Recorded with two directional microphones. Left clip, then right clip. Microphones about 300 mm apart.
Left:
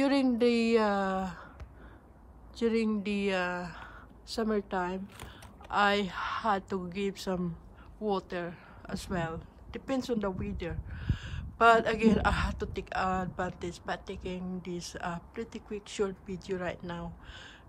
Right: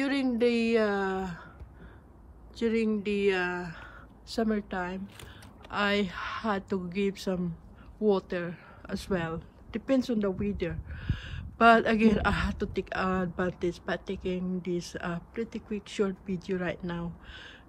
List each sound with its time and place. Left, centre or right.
0.0 s a woman's voice: centre
2.5 s speech: centre